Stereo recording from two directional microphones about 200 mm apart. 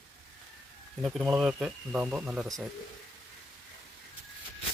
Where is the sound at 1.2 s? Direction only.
5° right (ahead or behind).